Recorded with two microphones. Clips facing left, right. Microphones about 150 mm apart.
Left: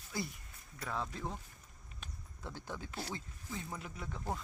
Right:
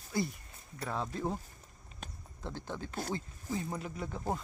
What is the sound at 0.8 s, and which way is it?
Speech, 25° right (ahead or behind).